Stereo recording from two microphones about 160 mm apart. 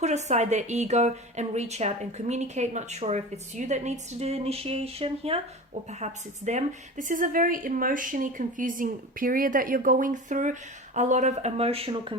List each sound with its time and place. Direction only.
0.0 s a woman's voice: 45° right (ahead or behind)